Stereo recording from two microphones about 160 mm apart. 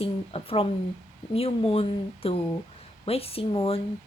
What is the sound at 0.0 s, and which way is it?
A woman's voice, 35° left (ahead or behind).